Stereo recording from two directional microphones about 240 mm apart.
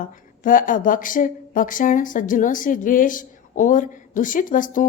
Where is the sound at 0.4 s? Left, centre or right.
Left.